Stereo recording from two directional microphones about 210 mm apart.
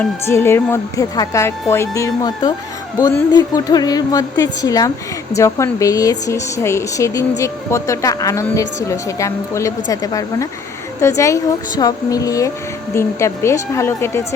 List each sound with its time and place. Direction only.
0.0 s a woman's voice: 10° left (ahead or behind)